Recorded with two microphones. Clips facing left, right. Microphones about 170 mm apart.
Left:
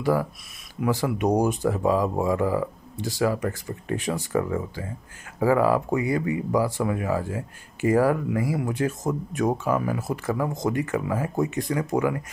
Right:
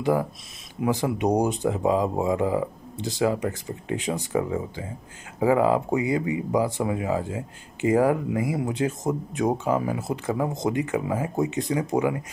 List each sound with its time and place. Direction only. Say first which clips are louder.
0.0 s speech: even; 20° right (ahead or behind)